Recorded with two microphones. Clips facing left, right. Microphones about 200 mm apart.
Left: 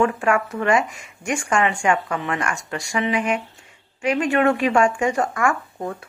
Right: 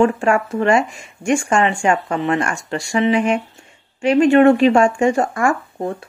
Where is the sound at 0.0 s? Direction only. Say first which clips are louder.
Right 4 dB; 30° right (ahead or behind).